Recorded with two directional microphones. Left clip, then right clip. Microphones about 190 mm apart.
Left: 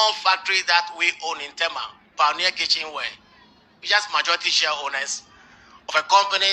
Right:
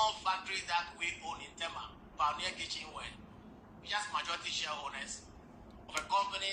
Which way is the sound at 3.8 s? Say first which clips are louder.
Left 16 dB; 50° left (ahead or behind).